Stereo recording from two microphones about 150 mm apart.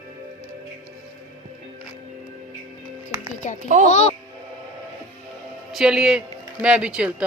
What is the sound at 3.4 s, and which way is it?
Speech, 55° left (ahead or behind).